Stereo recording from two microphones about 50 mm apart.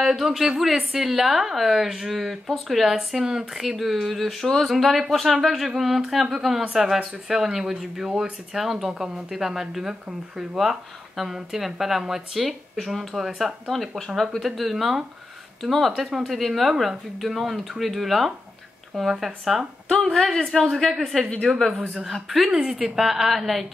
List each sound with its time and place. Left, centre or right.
0.0 s a woman's voice: centre
6.9 s a woman's voice: centre
19.9 s a woman's voice: centre